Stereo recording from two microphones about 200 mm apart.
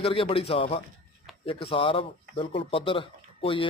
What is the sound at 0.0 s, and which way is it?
Speech, 25° left (ahead or behind).